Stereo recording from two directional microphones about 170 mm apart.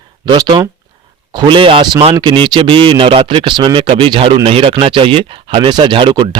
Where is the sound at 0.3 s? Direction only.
25° right (ahead or behind).